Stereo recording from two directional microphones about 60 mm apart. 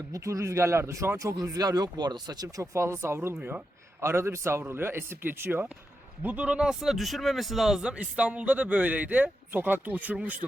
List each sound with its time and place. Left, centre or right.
0.1 s speech: right
1.4 s speech: right
2.7 s a man's voice: right
6.2 s a man's voice: right; by 7.8 s centre
7.8 s speech: centre